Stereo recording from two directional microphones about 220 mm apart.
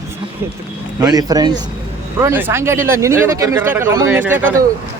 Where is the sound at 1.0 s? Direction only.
15° right (ahead or behind).